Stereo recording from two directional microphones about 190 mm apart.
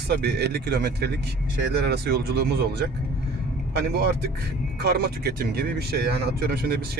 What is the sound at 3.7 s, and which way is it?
Speech, 60° right (ahead or behind).